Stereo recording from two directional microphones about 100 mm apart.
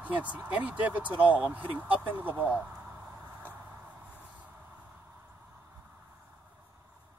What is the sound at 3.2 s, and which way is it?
Vehicle, 20° right (ahead or behind).